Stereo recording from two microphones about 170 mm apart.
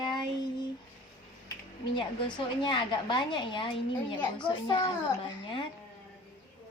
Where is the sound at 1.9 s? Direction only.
25° left (ahead or behind).